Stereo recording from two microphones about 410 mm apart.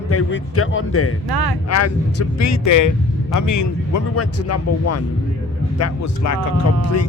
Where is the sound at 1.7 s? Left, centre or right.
Left.